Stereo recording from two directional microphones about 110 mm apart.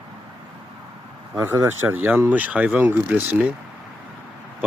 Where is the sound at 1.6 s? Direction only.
20° right (ahead or behind).